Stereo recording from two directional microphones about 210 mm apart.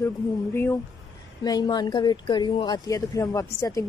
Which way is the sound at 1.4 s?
20° left (ahead or behind).